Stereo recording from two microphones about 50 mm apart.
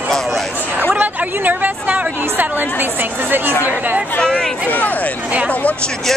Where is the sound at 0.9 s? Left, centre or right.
Right.